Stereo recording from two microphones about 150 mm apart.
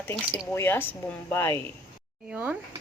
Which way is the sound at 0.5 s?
15° left (ahead or behind).